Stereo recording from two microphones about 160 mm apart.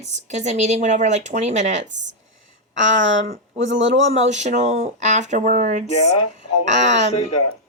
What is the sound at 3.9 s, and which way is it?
Speech, 45° right (ahead or behind).